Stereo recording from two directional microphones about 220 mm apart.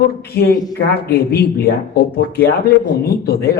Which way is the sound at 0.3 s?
45° left (ahead or behind).